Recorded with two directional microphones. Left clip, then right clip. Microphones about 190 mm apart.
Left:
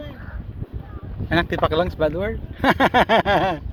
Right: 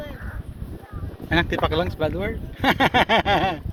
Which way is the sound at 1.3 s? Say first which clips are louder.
Left 2 dB; 20° left (ahead or behind).